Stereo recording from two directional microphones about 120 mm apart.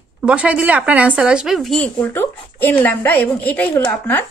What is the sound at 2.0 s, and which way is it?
Speech, 20° left (ahead or behind).